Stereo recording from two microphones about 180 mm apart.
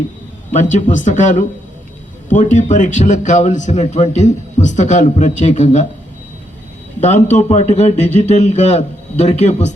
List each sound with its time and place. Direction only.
0.5 s a man's voice: 45° left (ahead or behind)
7.0 s a man's voice: 40° left (ahead or behind)